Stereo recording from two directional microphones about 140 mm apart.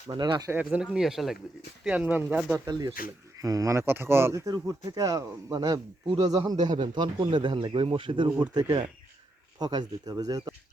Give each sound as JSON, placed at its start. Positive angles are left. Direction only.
{"t": 0.1, "sound": "speech", "side_deg": -35}
{"t": 0.5, "sound": "speech", "side_deg": -10}
{"t": 2.6, "sound": "speech", "side_deg": -30}